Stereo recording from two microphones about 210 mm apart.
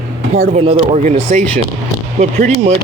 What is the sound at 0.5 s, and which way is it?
Speech, 30° right (ahead or behind).